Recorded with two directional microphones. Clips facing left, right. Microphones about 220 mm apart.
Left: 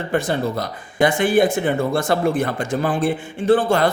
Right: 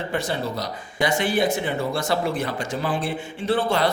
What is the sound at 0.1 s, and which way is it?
Speech, 50° left (ahead or behind).